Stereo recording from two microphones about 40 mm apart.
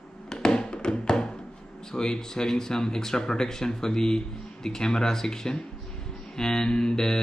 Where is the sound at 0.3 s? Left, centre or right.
Centre.